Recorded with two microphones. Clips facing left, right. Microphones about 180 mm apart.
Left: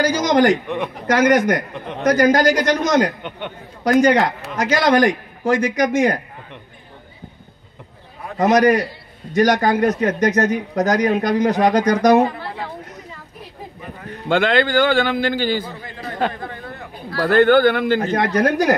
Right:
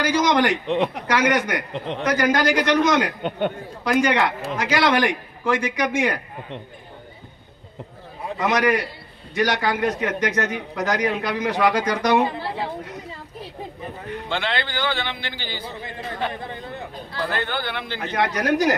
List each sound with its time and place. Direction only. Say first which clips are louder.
0.0 s a man's voice: left 4 dB; 45° left (ahead or behind)
3.2 s a man's voice: right 6 dB; 40° right (ahead or behind)
4.0 s a man's voice: left 5 dB; 40° left (ahead or behind)
8.4 s a man's voice: left 6 dB; 45° left (ahead or behind)
12.3 s speech: right 1 dB; 25° right (ahead or behind)
14.3 s a man's voice: left 11 dB; 50° left (ahead or behind)